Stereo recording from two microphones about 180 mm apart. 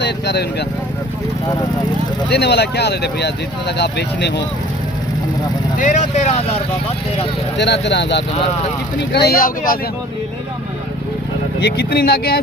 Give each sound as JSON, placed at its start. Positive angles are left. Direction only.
{"t": 0.0, "sound": "speech", "side_deg": 70}
{"t": 2.3, "sound": "speech", "side_deg": 65}
{"t": 5.7, "sound": "speech", "side_deg": 45}
{"t": 7.5, "sound": "speech", "side_deg": 75}
{"t": 11.6, "sound": "speech", "side_deg": 60}